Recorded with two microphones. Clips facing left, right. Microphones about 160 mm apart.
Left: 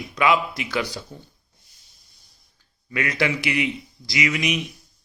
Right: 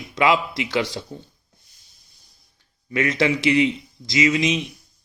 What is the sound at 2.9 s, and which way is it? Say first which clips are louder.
A man's voice: right 4 dB; 25° right (ahead or behind).